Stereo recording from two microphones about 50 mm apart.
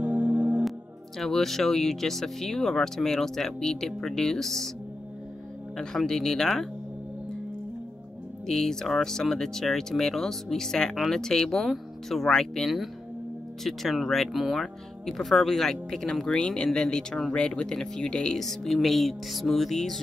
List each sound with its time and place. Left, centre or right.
0.0 s music: right
0.7 s speech: centre
5.8 s speech: centre
8.5 s speech: centre
12.6 s music: centre
14.4 s speech: centre
18.4 s music: centre